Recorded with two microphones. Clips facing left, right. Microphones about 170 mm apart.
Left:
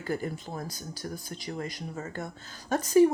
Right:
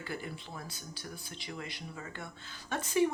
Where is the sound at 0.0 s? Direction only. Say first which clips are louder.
Left 8 dB; 45° left (ahead or behind).